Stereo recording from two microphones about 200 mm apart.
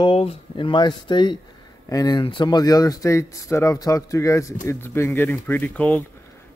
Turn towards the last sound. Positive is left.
turn(degrees=5)  # may be behind; listen again after turning